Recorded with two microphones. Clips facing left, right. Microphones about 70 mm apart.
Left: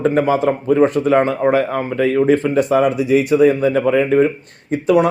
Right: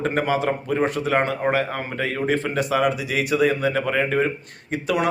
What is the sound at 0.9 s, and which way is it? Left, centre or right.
Speech, left.